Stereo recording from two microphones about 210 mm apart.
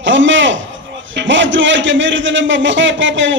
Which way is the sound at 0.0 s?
60° right (ahead or behind).